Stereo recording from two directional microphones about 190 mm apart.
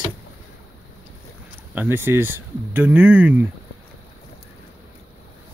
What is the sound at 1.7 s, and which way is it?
Speech, 10° right (ahead or behind).